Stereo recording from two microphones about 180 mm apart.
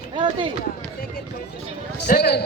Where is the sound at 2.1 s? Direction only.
65° left (ahead or behind).